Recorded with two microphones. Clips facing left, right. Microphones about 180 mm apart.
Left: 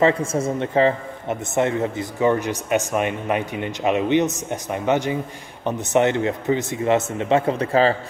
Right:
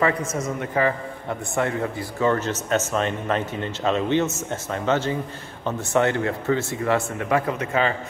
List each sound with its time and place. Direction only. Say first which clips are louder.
0.0 s a man's voice: left 4 dB; 30° left (ahead or behind)